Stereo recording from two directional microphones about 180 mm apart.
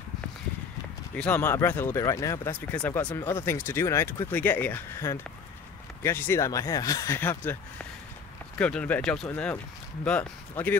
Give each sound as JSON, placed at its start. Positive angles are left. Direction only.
{"t": 1.1, "sound": "speech", "side_deg": 10}
{"t": 8.5, "sound": "speech", "side_deg": 5}